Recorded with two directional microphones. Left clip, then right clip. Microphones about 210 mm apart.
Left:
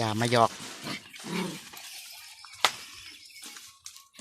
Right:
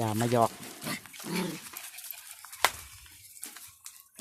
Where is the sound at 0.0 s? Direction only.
5° right (ahead or behind).